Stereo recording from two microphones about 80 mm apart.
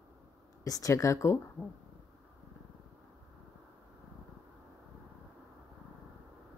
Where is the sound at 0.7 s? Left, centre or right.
Left.